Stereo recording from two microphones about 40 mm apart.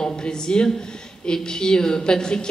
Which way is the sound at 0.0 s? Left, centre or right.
Centre.